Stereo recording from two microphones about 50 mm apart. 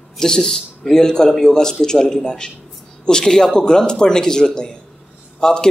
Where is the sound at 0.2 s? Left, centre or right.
Centre.